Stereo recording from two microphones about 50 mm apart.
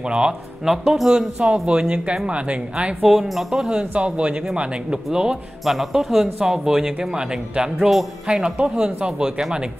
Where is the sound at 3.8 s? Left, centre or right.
Right.